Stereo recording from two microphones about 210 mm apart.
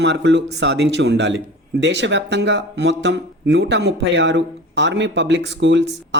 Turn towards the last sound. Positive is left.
turn(degrees=-55)  # may be behind; listen again after turning